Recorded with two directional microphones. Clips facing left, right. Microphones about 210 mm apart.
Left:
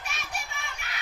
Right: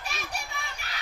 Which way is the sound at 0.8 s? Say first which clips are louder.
Even; 35° right (ahead or behind).